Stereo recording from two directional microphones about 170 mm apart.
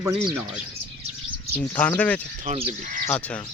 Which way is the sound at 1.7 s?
10° left (ahead or behind).